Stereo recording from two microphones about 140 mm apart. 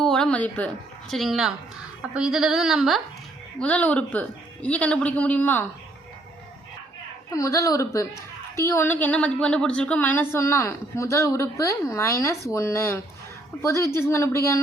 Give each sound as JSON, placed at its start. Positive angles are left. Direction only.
{"t": 0.0, "sound": "a woman's voice", "side_deg": 5}
{"t": 1.1, "sound": "speech", "side_deg": 0}
{"t": 3.6, "sound": "a woman's voice", "side_deg": 10}
{"t": 7.3, "sound": "a woman's voice", "side_deg": 25}